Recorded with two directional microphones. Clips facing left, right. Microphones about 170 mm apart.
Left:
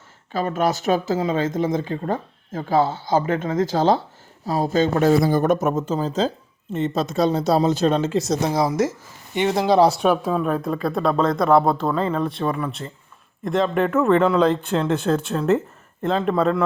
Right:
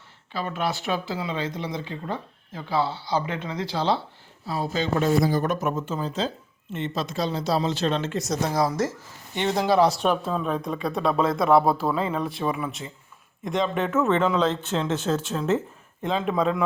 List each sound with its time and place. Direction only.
0.3 s speech: 45° left (ahead or behind)
5.0 s speech: 60° left (ahead or behind); by 8.0 s 45° left (ahead or behind)
8.1 s speech: 30° left (ahead or behind)
8.4 s speech: 15° left (ahead or behind)
9.7 s speech: 35° left (ahead or behind)
10.0 s speech: 10° left (ahead or behind)
15.1 s speech: centre (ahead or behind)